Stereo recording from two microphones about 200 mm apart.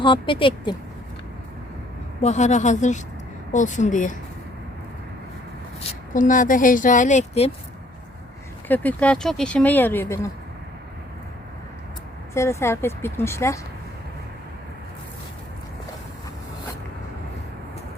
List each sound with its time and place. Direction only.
0.0 s speech: 25° left (ahead or behind)
2.2 s speech: 35° left (ahead or behind)
5.9 s speech: 40° left (ahead or behind)
8.6 s speech: 10° left (ahead or behind)
12.3 s speech: 15° left (ahead or behind)